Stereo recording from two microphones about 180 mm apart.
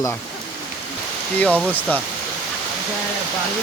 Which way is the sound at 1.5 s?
5° right (ahead or behind).